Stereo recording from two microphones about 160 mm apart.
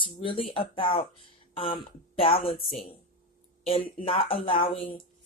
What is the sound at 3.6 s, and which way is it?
Speech, 35° left (ahead or behind).